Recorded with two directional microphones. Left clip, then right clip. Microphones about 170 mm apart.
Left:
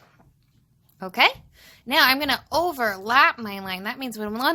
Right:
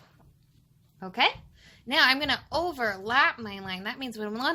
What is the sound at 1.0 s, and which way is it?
A woman's voice, 40° left (ahead or behind).